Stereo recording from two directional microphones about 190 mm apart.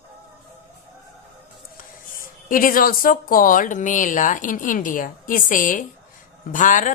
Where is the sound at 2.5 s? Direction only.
45° left (ahead or behind).